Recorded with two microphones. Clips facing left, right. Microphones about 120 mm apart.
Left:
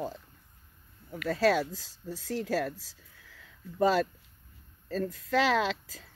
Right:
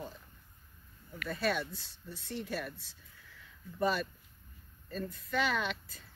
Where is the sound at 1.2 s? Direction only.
90° left.